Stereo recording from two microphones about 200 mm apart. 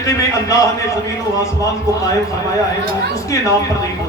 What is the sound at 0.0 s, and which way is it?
Speech, 15° left (ahead or behind).